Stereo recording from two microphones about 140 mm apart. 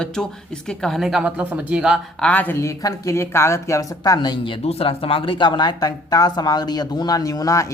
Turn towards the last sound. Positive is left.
turn(degrees=25)  # may be behind; listen again after turning